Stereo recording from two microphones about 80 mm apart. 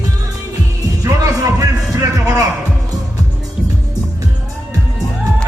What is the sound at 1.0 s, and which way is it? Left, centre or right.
Music, right.